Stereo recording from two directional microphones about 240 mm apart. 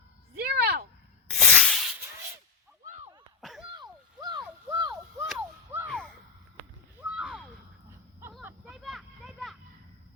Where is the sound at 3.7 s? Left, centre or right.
Centre.